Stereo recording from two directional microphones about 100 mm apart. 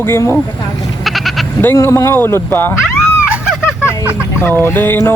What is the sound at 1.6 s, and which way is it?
Speech, 25° left (ahead or behind).